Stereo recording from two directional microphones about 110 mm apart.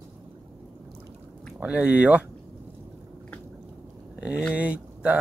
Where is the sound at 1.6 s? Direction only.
10° right (ahead or behind).